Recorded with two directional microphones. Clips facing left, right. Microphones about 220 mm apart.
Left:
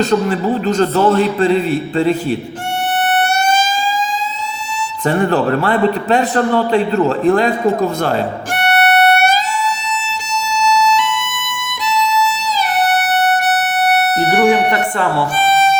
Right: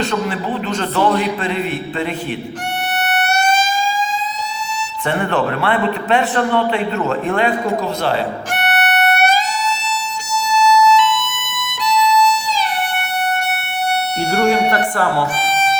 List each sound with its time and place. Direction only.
0.0 s a man's voice: 40° left (ahead or behind)
5.0 s a man's voice: 40° left (ahead or behind)
12.2 s music: 5° left (ahead or behind)
12.8 s music: 85° left
14.2 s music: 15° left (ahead or behind)